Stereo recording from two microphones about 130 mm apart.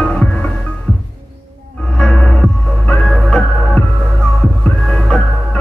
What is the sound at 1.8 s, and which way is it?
Music, 5° left (ahead or behind).